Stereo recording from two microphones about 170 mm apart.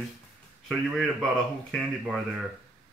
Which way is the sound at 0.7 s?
Centre (ahead or behind).